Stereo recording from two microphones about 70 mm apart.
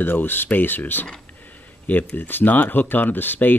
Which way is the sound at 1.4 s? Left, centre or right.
Left.